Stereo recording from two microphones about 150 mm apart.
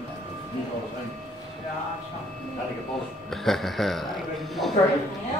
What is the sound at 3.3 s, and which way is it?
Music, centre (ahead or behind).